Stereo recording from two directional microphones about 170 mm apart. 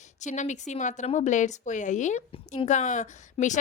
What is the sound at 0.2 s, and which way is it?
A woman's voice, 45° left (ahead or behind).